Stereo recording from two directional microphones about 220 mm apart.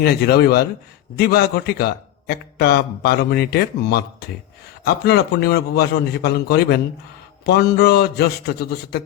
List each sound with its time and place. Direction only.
0.0 s a man's voice: 45° left (ahead or behind)